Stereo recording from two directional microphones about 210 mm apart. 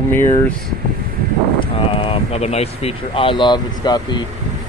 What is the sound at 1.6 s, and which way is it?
Speech, 25° left (ahead or behind).